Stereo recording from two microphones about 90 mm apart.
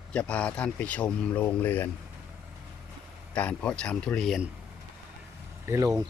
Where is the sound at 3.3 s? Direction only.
15° left (ahead or behind).